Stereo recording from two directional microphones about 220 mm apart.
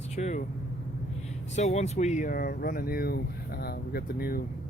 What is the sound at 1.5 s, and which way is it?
Speech, 30° left (ahead or behind).